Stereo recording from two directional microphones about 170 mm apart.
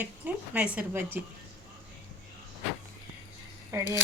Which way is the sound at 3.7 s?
15° right (ahead or behind).